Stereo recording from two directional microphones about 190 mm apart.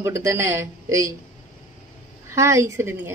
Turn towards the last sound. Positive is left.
turn(degrees=-10)  # may be behind; listen again after turning